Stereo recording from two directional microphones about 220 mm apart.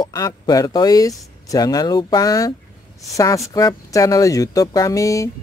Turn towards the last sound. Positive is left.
turn(degrees=15)  # may be behind; listen again after turning